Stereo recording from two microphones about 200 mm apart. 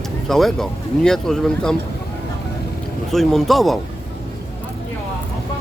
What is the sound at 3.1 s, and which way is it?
Speech, centre (ahead or behind).